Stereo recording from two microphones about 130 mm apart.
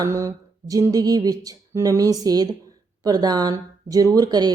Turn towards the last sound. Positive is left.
turn(degrees=-30)  # may be behind; listen again after turning